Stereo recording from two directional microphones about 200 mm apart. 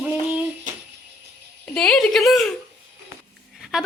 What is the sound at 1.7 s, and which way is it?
Speech, 5° left (ahead or behind).